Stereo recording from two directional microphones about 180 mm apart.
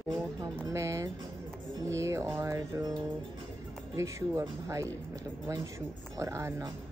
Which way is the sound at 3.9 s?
15° right (ahead or behind).